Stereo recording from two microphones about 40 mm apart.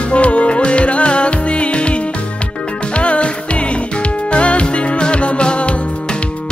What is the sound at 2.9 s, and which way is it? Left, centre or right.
Music, left.